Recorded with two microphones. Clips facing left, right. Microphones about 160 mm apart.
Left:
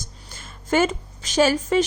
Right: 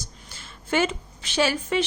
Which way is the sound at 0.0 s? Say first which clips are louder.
Left 2 dB; 50° left (ahead or behind).